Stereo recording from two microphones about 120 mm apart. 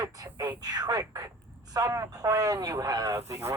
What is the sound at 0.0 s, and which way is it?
Speech, 30° right (ahead or behind).